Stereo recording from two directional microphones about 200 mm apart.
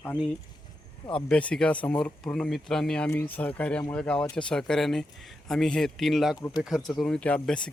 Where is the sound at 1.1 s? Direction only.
5° left (ahead or behind).